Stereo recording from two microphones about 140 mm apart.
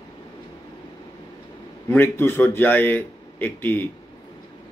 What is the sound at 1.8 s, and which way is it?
A man's voice, 15° left (ahead or behind).